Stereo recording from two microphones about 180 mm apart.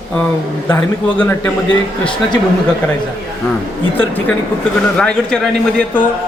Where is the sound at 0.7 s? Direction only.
10° left (ahead or behind).